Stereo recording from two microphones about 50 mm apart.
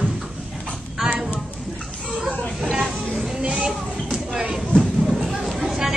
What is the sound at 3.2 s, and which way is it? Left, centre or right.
Music, centre.